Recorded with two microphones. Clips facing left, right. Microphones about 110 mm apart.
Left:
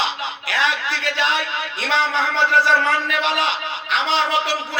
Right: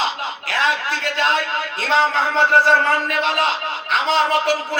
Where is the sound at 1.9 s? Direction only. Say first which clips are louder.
Right 3 dB; 45° right (ahead or behind).